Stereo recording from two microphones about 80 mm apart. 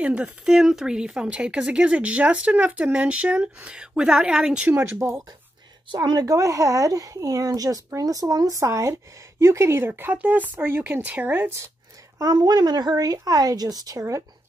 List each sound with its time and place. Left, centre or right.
0.0 s speech: centre
4.7 s speech: right
5.9 s speech: right
12.2 s speech: right